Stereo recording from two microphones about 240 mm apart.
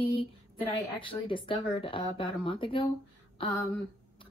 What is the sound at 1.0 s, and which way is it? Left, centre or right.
A woman's voice, left.